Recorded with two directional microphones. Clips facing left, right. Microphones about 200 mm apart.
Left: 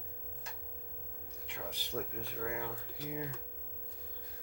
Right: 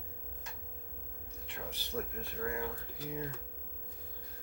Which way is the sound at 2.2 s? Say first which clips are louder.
Right 1 dB; 15° left (ahead or behind).